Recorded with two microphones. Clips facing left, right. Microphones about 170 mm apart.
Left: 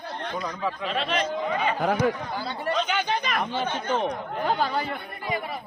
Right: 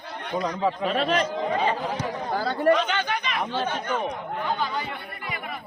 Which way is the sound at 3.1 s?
25° left (ahead or behind).